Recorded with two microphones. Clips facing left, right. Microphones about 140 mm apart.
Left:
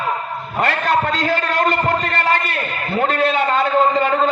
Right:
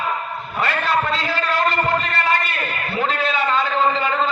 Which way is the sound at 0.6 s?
50° left (ahead or behind).